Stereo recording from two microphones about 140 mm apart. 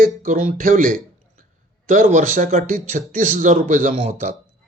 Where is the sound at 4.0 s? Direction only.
55° right (ahead or behind).